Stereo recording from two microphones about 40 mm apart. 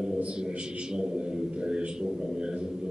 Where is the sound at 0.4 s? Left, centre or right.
Right.